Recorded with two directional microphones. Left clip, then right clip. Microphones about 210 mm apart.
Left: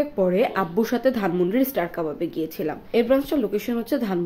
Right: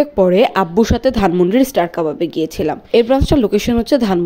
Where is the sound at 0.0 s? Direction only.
35° right (ahead or behind).